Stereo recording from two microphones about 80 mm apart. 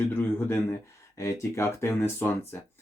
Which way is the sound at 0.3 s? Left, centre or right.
Left.